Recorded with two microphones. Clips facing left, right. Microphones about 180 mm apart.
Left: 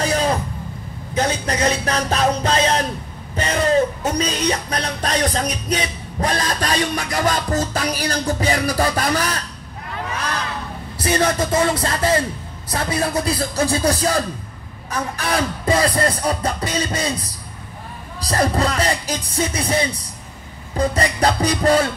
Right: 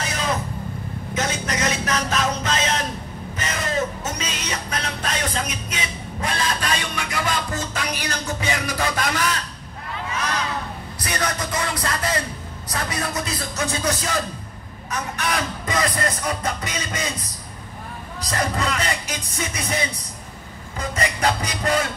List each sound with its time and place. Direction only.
0.0 s vehicle: 35° left (ahead or behind)
1.1 s a sound: 35° left (ahead or behind)
4.1 s music: 35° left (ahead or behind)
11.0 s speech: 30° left (ahead or behind)
18.2 s speech: 35° left (ahead or behind)